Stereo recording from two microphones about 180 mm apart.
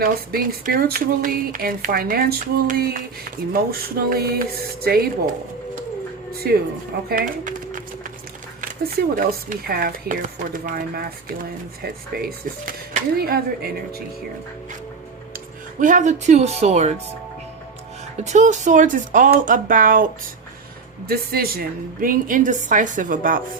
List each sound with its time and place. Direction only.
0.0 s a woman's voice: 55° right (ahead or behind)
7.1 s a sound: 50° right (ahead or behind)
8.6 s speech: 50° right (ahead or behind)
12.1 s speech: 60° right (ahead or behind)
15.8 s speech: 45° right (ahead or behind)
18.2 s a woman's voice: 40° right (ahead or behind)
21.1 s a woman's voice: 55° right (ahead or behind)